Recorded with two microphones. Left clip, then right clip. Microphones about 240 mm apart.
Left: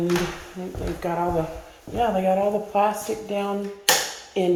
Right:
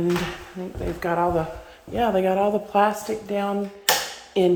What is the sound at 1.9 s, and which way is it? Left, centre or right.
Speech, right.